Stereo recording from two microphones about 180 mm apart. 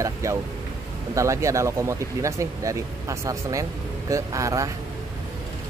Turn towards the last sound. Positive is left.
turn(degrees=-20)  # may be behind; listen again after turning